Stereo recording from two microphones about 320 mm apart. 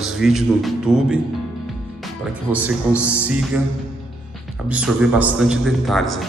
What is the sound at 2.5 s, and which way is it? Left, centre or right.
Speech, centre.